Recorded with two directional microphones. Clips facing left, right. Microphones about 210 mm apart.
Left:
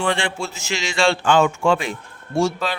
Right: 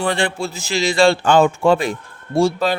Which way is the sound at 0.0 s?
35° right (ahead or behind).